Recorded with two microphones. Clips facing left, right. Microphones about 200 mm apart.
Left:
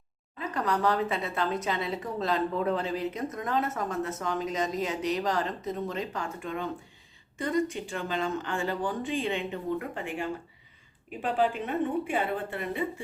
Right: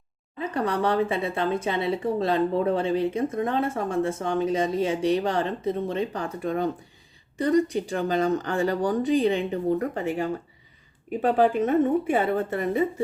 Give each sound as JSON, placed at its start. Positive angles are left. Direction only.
{"t": 0.4, "sound": "a woman's voice", "side_deg": -30}